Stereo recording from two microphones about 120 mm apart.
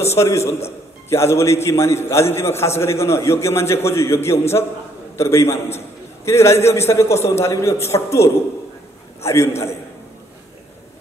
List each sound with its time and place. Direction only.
0.2 s a man's voice: 20° left (ahead or behind)
9.2 s a man's voice: 25° left (ahead or behind)